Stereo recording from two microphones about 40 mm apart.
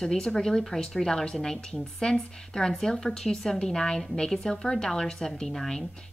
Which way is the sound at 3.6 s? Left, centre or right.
Centre.